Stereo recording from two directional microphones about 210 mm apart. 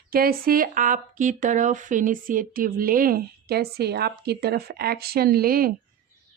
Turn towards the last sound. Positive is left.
turn(degrees=-45)  # may be behind; listen again after turning